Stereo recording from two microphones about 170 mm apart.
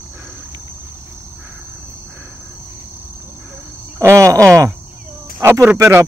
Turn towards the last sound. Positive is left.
turn(degrees=-15)  # may be behind; listen again after turning